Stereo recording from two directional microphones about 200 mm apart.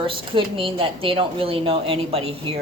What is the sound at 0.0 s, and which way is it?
Speech, 25° right (ahead or behind).